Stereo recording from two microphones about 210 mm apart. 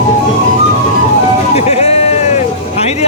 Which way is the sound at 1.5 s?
30° left (ahead or behind).